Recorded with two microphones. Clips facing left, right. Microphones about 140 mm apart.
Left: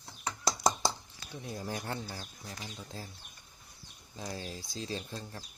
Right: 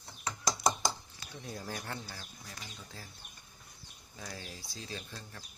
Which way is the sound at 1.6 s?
15° left (ahead or behind).